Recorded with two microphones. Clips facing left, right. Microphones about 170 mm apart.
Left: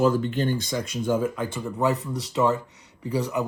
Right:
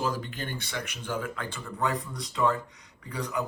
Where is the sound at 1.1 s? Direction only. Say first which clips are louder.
Left 8 dB; 20° left (ahead or behind).